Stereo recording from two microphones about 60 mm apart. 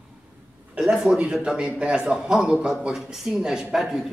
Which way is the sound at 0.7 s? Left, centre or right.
Centre.